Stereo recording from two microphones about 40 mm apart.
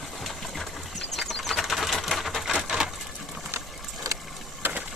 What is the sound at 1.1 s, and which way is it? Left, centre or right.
Bird flight, centre.